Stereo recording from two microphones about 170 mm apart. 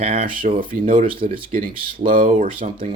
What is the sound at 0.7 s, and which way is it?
Speech, 55° right (ahead or behind).